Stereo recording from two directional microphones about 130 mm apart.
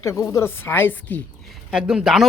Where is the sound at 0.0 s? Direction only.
25° left (ahead or behind).